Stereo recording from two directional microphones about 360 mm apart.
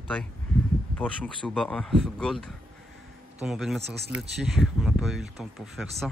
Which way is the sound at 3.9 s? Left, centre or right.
Right.